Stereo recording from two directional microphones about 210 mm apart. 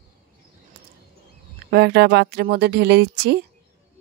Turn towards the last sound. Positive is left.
turn(degrees=-55)  # may be behind; listen again after turning